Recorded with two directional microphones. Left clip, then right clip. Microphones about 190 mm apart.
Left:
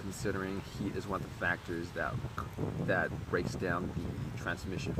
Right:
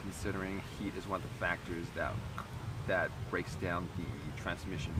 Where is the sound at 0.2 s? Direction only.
15° left (ahead or behind).